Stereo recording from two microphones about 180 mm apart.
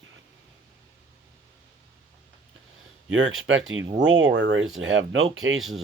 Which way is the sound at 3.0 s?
90° right.